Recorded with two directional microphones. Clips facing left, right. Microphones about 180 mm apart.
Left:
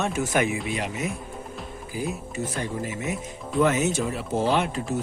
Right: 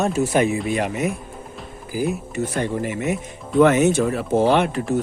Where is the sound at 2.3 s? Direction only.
65° right (ahead or behind).